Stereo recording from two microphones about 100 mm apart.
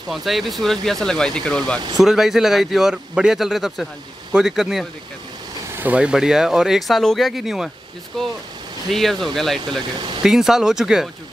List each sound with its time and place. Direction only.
0.1 s speech: centre (ahead or behind)
2.0 s speech: 5° right (ahead or behind)